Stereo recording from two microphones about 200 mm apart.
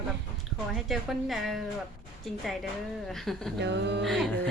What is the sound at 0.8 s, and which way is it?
Speech, centre (ahead or behind).